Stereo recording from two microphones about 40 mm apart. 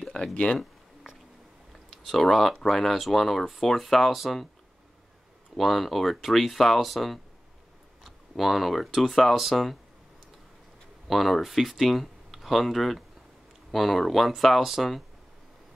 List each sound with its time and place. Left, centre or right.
0.1 s speech: left
2.0 s speech: centre
5.6 s speech: centre
8.4 s speech: centre
11.1 s speech: centre